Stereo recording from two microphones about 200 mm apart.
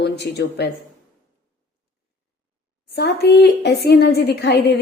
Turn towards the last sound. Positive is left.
turn(degrees=55)  # may be behind; listen again after turning